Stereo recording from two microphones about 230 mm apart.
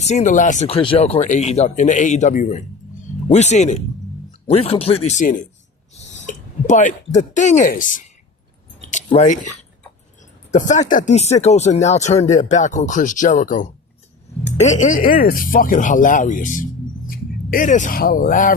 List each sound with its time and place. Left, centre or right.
0.0 s speech: left
10.5 s speech: left